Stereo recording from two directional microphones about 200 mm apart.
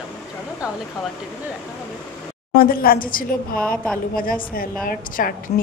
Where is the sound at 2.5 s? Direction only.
50° left (ahead or behind).